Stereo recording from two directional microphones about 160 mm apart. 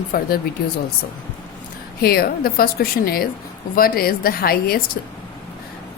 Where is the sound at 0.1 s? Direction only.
65° left (ahead or behind).